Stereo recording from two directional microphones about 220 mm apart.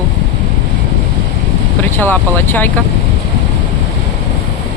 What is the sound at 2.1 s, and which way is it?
Speech, 10° left (ahead or behind).